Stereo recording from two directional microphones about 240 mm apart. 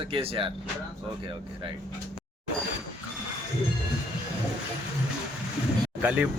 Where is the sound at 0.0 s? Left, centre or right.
Right.